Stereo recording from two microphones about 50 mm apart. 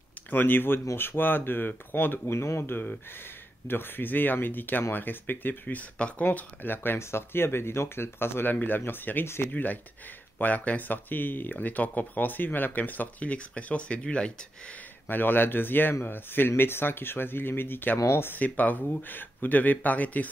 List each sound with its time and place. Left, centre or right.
0.3 s speech: left
5.9 s speech: left
6.2 s speech: left
7.0 s speech: left
8.5 s speech: left
9.2 s speech: left
9.5 s speech: left; by 14.8 s centre
15.0 s speech: left